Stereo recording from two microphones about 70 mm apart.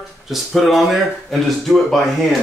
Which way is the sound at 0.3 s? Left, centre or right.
Centre.